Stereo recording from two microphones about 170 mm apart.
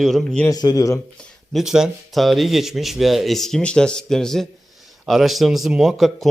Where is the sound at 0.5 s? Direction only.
25° left (ahead or behind).